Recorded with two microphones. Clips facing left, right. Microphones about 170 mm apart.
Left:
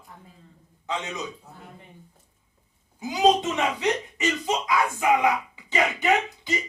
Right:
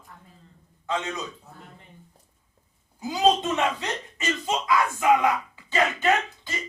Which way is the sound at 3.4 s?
15° left (ahead or behind).